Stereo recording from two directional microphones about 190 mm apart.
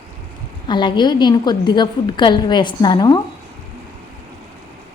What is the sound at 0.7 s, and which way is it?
A woman's voice, 25° left (ahead or behind).